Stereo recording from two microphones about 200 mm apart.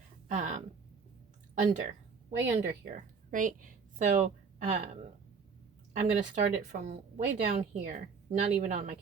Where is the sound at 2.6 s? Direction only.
40° right (ahead or behind).